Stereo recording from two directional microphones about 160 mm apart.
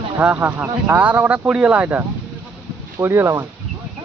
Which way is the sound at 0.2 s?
10° right (ahead or behind).